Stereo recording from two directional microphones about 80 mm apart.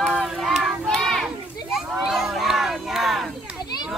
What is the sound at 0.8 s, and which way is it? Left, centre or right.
Children playing, centre.